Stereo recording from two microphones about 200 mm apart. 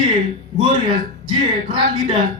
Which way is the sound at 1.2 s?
25° right (ahead or behind).